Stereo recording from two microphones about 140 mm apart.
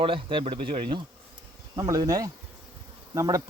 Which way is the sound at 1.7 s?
25° right (ahead or behind).